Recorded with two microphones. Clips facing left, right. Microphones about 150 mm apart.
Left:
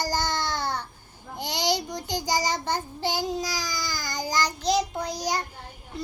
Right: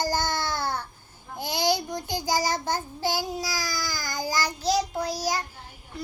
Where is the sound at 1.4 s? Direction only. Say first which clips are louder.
Right 2 dB; 10° right (ahead or behind).